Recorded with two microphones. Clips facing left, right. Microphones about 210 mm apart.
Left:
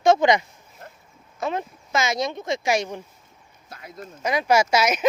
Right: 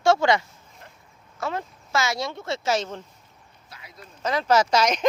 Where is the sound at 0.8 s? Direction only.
45° left (ahead or behind).